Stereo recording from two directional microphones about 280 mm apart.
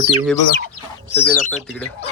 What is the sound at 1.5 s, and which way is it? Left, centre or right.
Speech, centre.